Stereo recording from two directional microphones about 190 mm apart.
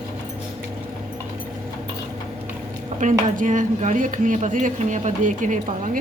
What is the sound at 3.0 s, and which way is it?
A woman's voice, 40° right (ahead or behind).